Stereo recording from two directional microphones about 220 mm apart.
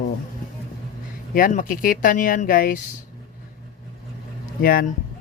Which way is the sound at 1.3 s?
40° left (ahead or behind).